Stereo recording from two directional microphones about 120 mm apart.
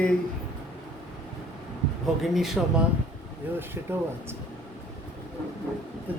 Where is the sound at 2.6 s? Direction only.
Centre (ahead or behind).